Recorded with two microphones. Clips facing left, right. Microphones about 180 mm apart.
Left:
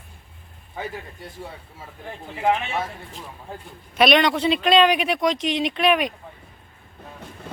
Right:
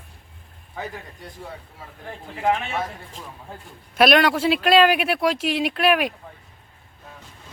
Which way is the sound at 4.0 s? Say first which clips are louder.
Right 1 dB; 5° right (ahead or behind).